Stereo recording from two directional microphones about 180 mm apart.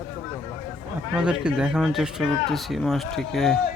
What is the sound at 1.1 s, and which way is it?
Speech, 5° right (ahead or behind).